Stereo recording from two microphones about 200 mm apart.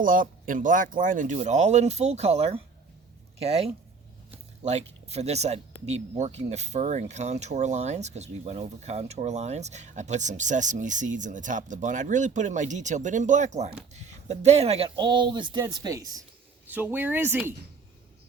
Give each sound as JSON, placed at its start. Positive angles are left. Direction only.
{"t": 0.0, "sound": "speech", "side_deg": -45}